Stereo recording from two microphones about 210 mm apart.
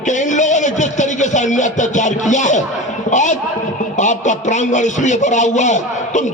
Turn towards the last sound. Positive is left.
turn(degrees=35)  # may be behind; listen again after turning